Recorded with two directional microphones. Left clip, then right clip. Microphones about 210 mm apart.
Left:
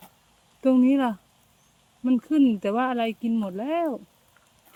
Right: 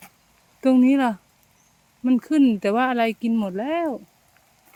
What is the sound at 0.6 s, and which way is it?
Speech, 25° right (ahead or behind).